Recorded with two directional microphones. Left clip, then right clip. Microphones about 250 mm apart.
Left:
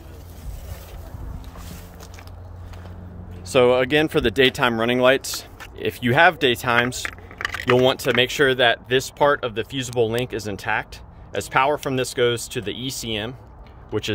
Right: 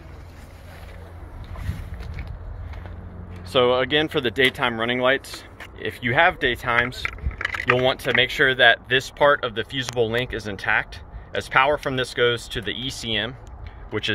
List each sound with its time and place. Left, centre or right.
3.4 s speech: left